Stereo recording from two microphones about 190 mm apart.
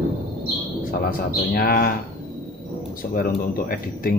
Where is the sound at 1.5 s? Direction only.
50° left (ahead or behind).